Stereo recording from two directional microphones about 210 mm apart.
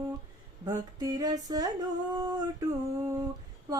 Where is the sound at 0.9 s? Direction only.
15° right (ahead or behind).